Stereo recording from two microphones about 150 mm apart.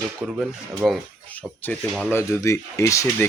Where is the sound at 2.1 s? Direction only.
15° left (ahead or behind).